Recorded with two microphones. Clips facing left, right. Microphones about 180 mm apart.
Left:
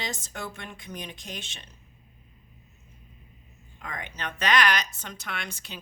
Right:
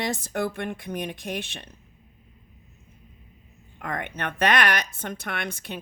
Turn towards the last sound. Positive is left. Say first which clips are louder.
# right 6 dB
turn(degrees=-55)  # may be behind; listen again after turning